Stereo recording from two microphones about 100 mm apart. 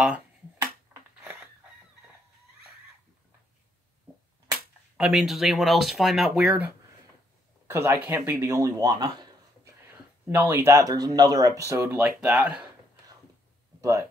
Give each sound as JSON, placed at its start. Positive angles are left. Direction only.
{"t": 0.6, "sound": "a sound", "side_deg": -25}
{"t": 4.9, "sound": "speech", "side_deg": -5}
{"t": 7.6, "sound": "speech", "side_deg": -25}
{"t": 10.5, "sound": "speech", "side_deg": -30}
{"t": 12.0, "sound": "speech", "side_deg": -10}
{"t": 13.7, "sound": "speech", "side_deg": -30}